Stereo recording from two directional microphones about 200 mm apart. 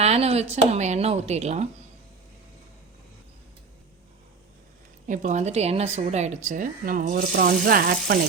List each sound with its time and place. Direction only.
0.0 s a woman's voice: 30° right (ahead or behind)
5.0 s a woman's voice: 40° right (ahead or behind)